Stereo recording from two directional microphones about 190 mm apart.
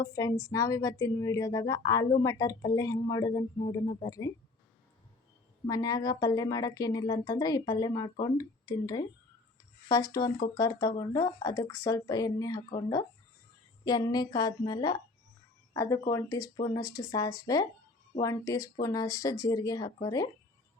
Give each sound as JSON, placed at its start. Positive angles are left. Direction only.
{"t": 0.0, "sound": "speech", "side_deg": 15}
{"t": 5.6, "sound": "speech", "side_deg": 20}